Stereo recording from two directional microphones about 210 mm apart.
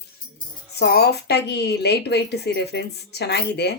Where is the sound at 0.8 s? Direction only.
50° left (ahead or behind).